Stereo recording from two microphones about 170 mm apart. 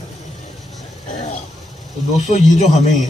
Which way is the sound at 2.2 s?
45° left (ahead or behind).